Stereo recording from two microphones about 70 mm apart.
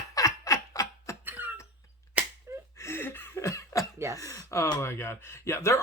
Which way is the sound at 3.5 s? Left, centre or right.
Left.